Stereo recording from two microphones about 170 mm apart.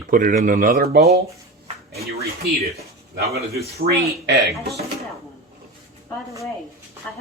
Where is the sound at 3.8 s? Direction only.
80° right.